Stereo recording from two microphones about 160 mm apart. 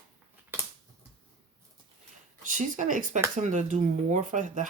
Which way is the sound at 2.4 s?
55° right (ahead or behind).